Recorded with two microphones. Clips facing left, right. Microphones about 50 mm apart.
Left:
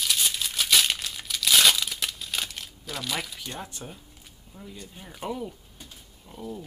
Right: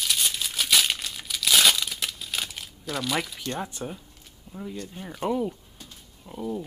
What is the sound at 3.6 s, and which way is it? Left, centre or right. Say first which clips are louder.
Speech: right 6 dB; centre.